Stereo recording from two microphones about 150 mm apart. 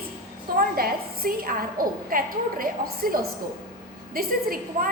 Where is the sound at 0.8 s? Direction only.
75° right (ahead or behind).